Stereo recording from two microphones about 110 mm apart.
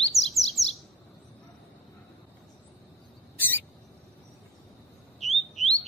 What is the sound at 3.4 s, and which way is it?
Rodents, 15° left (ahead or behind).